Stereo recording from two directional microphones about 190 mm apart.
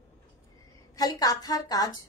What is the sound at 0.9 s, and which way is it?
Speech, 20° left (ahead or behind).